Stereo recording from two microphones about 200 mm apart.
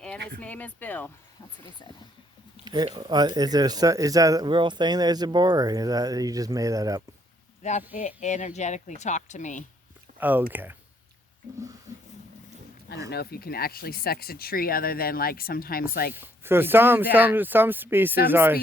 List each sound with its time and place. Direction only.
0.3 s speech: 10° left (ahead or behind)
2.6 s speech: 20° right (ahead or behind)
7.6 s speech: 35° left (ahead or behind)
10.2 s speech: 10° right (ahead or behind)
13.1 s speech: 50° left (ahead or behind)
16.1 s speech: 10° right (ahead or behind)